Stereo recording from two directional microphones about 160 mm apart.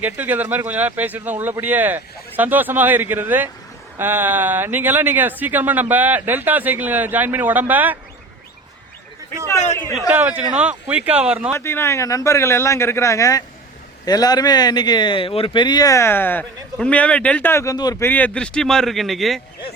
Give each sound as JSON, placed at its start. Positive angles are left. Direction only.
{"t": 0.0, "sound": "speech", "side_deg": -10}
{"t": 10.1, "sound": "speech", "side_deg": -10}
{"t": 11.5, "sound": "speech", "side_deg": 15}
{"t": 18.1, "sound": "a man's voice", "side_deg": 10}